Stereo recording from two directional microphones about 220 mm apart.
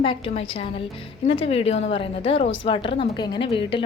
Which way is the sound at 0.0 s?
25° left (ahead or behind).